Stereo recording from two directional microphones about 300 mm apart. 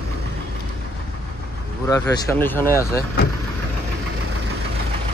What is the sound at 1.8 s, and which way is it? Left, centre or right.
Speech, centre.